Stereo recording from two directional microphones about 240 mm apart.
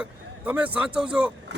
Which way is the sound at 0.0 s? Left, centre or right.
Centre.